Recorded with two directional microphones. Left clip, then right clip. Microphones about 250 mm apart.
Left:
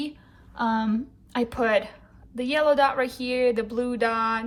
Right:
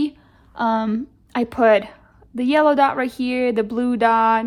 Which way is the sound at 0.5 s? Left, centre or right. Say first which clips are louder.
Right 5 dB; right.